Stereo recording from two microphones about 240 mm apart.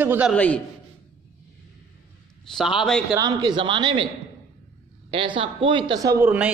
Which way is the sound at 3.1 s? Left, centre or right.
Centre.